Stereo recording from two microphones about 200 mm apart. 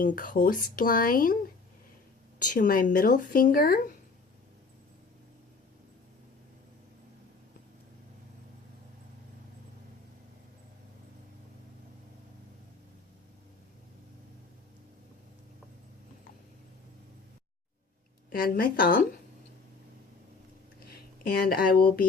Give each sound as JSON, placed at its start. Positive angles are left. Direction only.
{"t": 0.0, "sound": "speech", "side_deg": 45}
{"t": 2.4, "sound": "speech", "side_deg": 40}
{"t": 18.3, "sound": "speech", "side_deg": 45}
{"t": 20.9, "sound": "speech", "side_deg": 50}